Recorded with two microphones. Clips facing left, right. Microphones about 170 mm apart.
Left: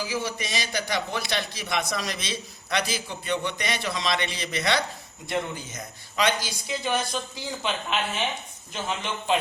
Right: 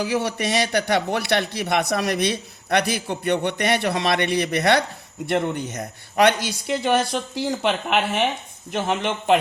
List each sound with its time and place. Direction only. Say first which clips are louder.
0.0 s a man's voice: right 7 dB; 65° right (ahead or behind)
5.2 s a man's voice: right 7 dB; 70° right (ahead or behind)